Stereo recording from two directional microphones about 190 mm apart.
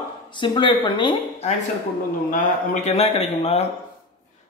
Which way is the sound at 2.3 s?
40° left (ahead or behind).